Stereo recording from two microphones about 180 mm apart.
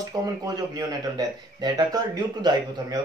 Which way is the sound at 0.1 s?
25° right (ahead or behind).